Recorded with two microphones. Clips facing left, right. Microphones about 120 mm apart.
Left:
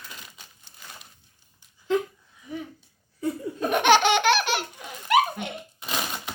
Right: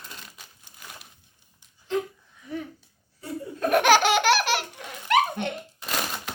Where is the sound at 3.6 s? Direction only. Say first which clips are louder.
Even; centre (ahead or behind).